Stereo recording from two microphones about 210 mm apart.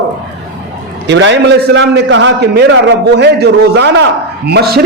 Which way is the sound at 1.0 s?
60° right (ahead or behind).